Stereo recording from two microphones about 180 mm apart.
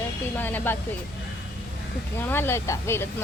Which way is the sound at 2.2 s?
10° left (ahead or behind).